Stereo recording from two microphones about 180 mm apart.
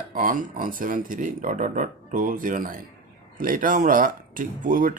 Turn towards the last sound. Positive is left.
turn(degrees=-50)  # may be behind; listen again after turning